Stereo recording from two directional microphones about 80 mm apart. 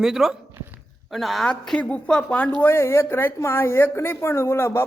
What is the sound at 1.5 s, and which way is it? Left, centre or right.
A woman's voice, centre.